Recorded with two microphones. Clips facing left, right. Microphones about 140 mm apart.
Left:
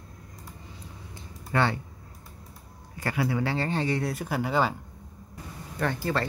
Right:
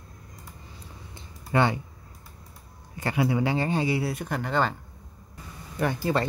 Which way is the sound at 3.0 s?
20° right (ahead or behind).